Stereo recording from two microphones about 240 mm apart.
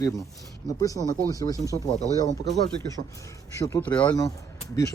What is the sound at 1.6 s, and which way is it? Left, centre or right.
Speech, centre.